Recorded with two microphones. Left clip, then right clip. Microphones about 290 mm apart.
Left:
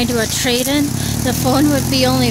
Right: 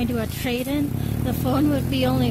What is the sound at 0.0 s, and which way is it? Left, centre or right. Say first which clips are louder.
Speech: left 9 dB; centre.